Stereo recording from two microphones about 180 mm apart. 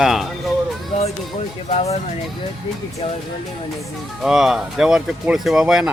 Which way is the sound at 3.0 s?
30° left (ahead or behind).